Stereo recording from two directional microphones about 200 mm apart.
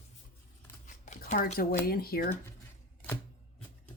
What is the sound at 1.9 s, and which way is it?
Speech, 50° left (ahead or behind).